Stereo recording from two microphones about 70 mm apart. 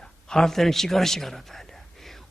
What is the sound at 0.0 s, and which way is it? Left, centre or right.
A man's voice, centre.